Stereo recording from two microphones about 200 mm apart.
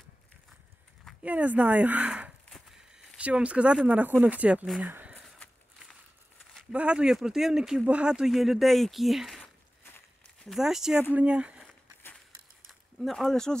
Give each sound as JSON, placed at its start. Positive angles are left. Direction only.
{"t": 1.0, "sound": "speech", "side_deg": -5}
{"t": 6.5, "sound": "speech", "side_deg": -5}
{"t": 9.8, "sound": "walk", "side_deg": 10}
{"t": 10.5, "sound": "speech", "side_deg": 0}
{"t": 13.0, "sound": "speech", "side_deg": 0}